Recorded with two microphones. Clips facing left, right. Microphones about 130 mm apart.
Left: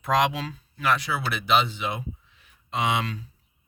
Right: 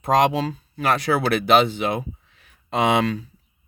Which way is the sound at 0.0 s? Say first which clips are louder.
Right 5 dB; 40° right (ahead or behind).